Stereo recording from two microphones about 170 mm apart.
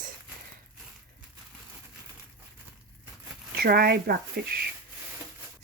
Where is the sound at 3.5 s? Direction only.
60° right (ahead or behind).